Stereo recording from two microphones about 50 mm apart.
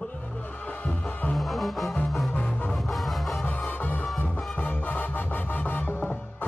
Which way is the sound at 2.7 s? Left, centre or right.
Centre.